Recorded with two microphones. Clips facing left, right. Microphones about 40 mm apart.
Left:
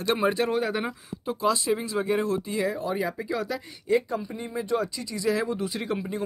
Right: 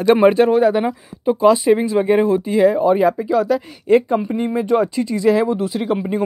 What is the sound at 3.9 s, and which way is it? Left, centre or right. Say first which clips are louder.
Speech: right 11 dB; right.